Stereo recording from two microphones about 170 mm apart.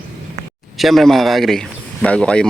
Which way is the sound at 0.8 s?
Centre (ahead or behind).